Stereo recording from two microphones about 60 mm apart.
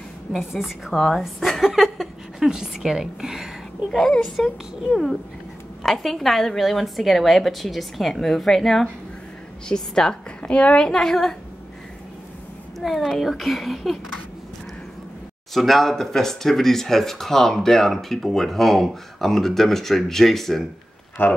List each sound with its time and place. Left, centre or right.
0.5 s a woman's voice: centre
12.8 s speech: centre
15.5 s speech: centre
21.2 s speech: left